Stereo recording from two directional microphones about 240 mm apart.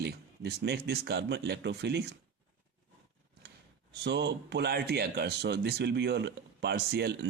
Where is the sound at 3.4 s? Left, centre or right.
Right.